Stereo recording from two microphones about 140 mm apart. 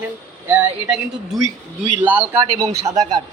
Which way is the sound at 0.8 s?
Centre (ahead or behind).